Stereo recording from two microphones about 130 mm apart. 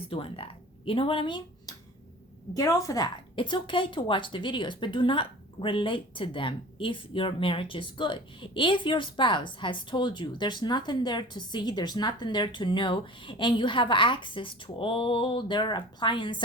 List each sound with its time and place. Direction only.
0.1 s speech: 45° left (ahead or behind)
2.5 s a woman's voice: 25° left (ahead or behind)